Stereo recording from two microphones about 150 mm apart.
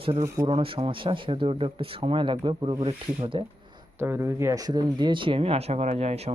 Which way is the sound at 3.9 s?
15° right (ahead or behind).